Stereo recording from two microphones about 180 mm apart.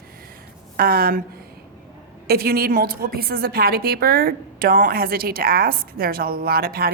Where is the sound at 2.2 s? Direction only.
60° right (ahead or behind).